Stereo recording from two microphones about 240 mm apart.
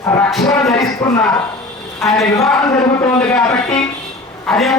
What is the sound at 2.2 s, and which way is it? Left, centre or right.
A man's voice, centre.